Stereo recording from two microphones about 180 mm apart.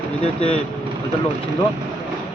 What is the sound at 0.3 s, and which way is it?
Speech, 35° left (ahead or behind).